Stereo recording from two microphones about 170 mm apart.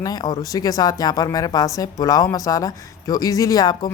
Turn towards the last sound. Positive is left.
turn(degrees=25)  # may be behind; listen again after turning